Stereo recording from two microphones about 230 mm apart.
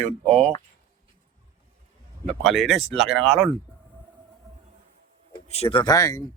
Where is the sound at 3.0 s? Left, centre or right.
Right.